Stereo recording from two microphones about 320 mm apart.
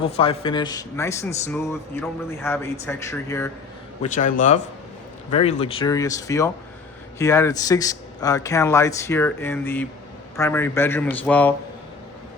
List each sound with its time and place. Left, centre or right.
0.0 s a man's voice: centre
4.0 s a man's voice: left; by 11.5 s centre